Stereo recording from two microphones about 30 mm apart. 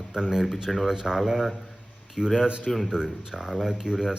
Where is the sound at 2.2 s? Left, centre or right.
Centre.